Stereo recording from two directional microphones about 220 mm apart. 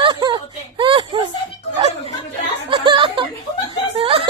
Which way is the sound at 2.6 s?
20° right (ahead or behind).